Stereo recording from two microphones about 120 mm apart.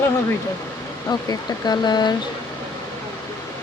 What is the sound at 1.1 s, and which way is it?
Speech, 35° left (ahead or behind).